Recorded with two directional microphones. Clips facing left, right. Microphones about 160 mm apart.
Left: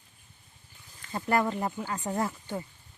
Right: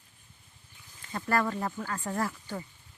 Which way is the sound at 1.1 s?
20° left (ahead or behind).